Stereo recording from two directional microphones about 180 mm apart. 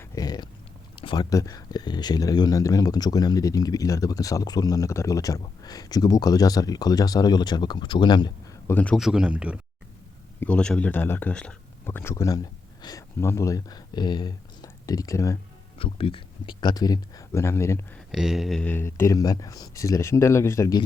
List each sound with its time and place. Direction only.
0.1 s a sound: 20° left (ahead or behind)
1.0 s speech: 25° left (ahead or behind)
8.7 s speech: 5° left (ahead or behind)
10.4 s speech: 5° left (ahead or behind)
15.8 s speech: 30° left (ahead or behind); by 17.8 s 15° left (ahead or behind)
18.1 s speech: centre (ahead or behind); by 20.8 s 20° left (ahead or behind)